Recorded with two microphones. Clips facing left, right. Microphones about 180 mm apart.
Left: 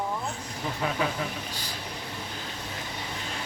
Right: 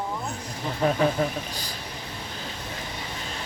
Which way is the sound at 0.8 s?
40° right (ahead or behind).